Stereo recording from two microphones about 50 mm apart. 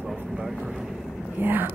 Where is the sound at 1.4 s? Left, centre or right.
Right.